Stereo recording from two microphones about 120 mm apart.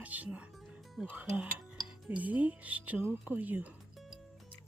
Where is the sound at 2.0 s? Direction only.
10° right (ahead or behind).